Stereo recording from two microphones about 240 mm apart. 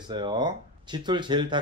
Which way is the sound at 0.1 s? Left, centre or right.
Centre.